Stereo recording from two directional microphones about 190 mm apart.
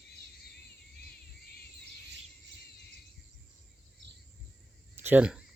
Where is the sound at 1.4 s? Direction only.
55° left (ahead or behind).